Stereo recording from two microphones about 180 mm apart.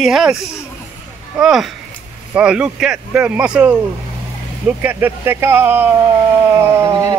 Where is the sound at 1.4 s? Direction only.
Centre (ahead or behind).